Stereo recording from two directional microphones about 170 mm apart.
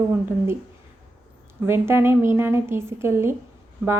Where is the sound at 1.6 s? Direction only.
15° right (ahead or behind).